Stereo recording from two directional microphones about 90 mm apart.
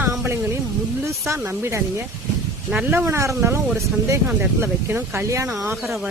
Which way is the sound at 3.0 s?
30° right (ahead or behind).